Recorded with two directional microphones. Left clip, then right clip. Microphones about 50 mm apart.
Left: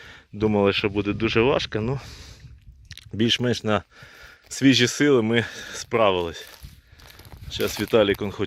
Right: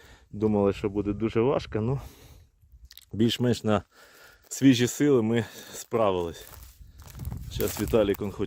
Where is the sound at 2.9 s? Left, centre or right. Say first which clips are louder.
Left 5 dB; right.